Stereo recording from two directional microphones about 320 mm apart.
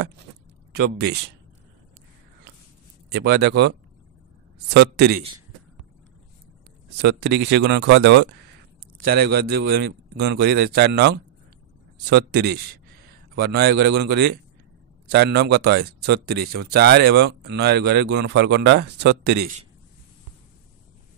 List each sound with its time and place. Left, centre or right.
3.1 s speech: right
4.7 s speech: right
7.0 s speech: right